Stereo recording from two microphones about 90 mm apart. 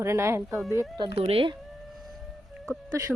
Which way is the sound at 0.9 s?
75° right (ahead or behind).